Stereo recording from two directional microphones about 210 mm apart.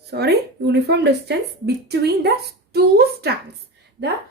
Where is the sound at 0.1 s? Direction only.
50° right (ahead or behind).